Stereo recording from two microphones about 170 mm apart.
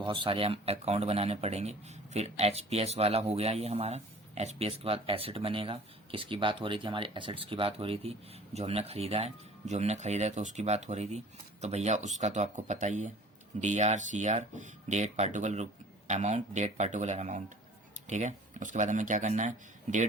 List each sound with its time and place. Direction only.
0.0 s speech: 30° right (ahead or behind); by 20.1 s 45° right (ahead or behind)